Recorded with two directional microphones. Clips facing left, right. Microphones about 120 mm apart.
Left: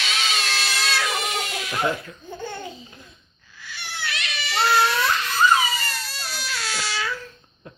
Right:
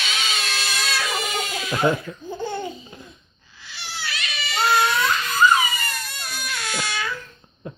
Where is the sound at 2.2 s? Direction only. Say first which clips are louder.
Right 5 dB; 10° right (ahead or behind).